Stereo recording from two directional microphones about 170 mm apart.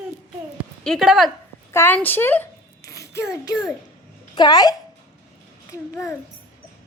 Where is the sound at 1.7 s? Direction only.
15° left (ahead or behind).